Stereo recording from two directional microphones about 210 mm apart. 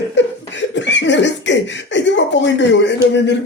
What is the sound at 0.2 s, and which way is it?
Cough, 60° left (ahead or behind).